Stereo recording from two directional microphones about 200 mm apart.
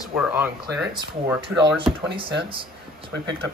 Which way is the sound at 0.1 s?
5° right (ahead or behind).